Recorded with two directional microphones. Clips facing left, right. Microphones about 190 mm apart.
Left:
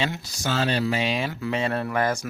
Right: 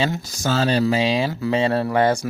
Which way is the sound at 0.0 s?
45° right (ahead or behind).